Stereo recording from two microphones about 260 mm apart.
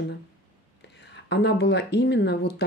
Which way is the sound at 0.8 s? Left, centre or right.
Left.